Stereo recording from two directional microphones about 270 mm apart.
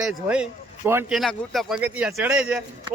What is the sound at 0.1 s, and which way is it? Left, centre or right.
Speech, centre.